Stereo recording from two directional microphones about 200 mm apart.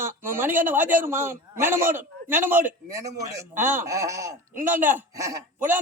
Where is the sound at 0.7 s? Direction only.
10° right (ahead or behind).